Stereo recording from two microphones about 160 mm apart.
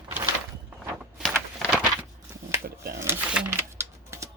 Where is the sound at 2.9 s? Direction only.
15° right (ahead or behind).